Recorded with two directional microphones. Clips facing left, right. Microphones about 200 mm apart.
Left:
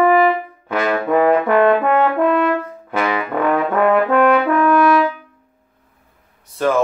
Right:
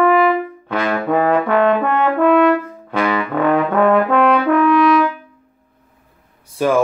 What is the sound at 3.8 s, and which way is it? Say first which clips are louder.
Brass instrument: left 1 dB; 5° left (ahead or behind).